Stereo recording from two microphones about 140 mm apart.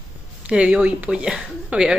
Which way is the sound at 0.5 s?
10° right (ahead or behind).